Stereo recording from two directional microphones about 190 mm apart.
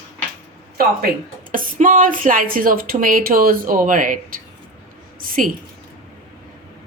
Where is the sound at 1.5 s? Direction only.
45° right (ahead or behind).